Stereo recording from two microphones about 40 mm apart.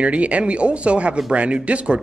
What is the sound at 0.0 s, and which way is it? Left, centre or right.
A man's voice, right.